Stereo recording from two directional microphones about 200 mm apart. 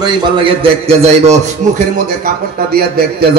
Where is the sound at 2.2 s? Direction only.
50° right (ahead or behind).